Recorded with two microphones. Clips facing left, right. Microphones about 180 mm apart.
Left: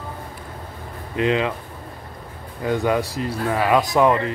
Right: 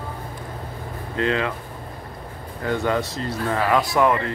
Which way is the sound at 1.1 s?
20° left (ahead or behind).